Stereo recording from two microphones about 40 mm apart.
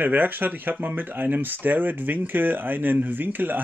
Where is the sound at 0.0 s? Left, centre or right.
Right.